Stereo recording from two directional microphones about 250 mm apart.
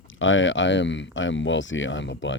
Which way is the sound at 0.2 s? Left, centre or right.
Left.